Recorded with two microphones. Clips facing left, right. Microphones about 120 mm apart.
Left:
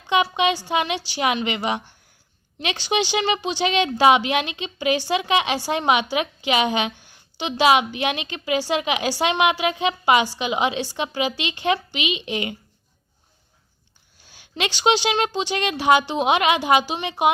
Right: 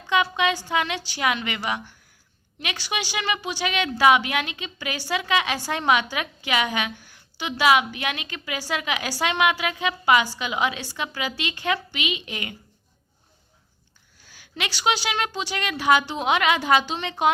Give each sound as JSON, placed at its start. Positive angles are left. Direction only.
{"t": 0.1, "sound": "speech", "side_deg": 20}
{"t": 14.3, "sound": "speech", "side_deg": 20}